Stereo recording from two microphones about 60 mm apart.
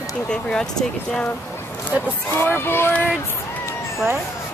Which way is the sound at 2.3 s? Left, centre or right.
Left.